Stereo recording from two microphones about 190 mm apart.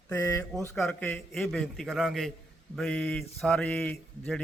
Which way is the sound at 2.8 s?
5° left (ahead or behind).